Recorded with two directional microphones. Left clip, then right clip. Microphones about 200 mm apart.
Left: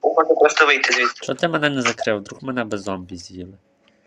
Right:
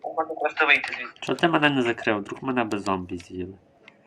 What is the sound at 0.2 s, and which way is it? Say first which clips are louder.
Speech: left 9 dB; 50° left (ahead or behind).